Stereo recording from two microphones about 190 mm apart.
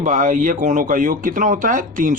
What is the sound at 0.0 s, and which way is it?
Speech, 40° right (ahead or behind).